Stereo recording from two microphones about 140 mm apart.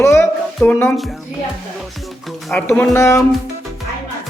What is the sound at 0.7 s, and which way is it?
Speech, 10° left (ahead or behind).